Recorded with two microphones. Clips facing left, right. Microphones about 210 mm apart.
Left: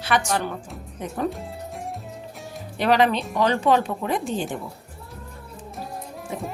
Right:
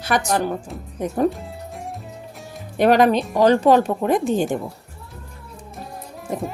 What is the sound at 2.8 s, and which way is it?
A woman's voice, 45° right (ahead or behind).